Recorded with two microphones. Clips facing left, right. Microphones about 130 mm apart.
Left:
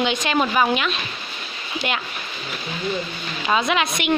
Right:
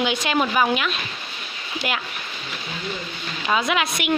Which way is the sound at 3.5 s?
Centre (ahead or behind).